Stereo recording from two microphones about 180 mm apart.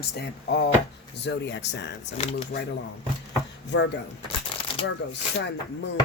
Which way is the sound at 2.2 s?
35° left (ahead or behind).